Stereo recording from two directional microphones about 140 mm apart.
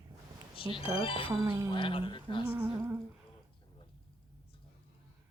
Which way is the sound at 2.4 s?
15° right (ahead or behind).